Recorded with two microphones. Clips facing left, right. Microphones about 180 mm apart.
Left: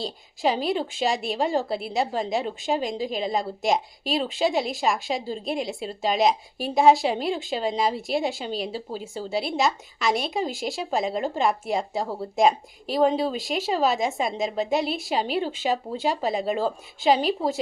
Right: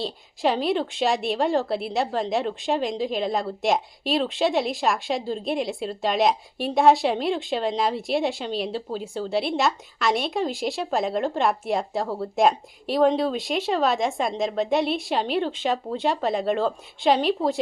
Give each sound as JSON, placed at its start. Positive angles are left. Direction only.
{"t": 0.0, "sound": "a woman's voice", "side_deg": 0}